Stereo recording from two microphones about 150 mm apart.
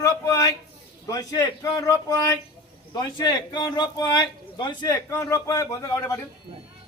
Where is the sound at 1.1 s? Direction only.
25° left (ahead or behind).